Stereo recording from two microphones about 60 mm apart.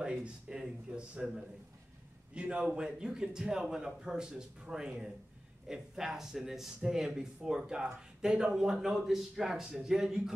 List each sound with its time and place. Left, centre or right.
0.0 s a man's voice: centre